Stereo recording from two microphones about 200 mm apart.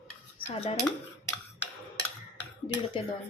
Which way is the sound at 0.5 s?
30° left (ahead or behind).